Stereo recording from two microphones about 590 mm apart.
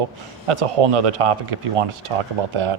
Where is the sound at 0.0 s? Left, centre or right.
Right.